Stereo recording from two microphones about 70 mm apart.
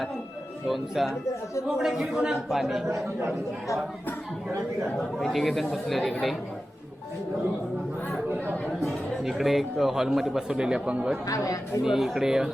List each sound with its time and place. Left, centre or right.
0.7 s speech: centre
5.1 s speech: centre
8.8 s speech: centre
11.3 s speech: left
11.9 s speech: centre